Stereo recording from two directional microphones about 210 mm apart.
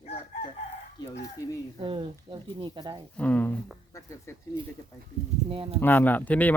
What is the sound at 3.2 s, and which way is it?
Speech, 5° left (ahead or behind).